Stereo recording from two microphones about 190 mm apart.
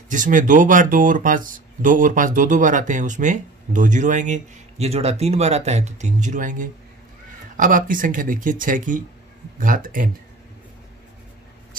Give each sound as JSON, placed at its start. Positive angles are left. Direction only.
{"t": 0.1, "sound": "speech", "side_deg": -45}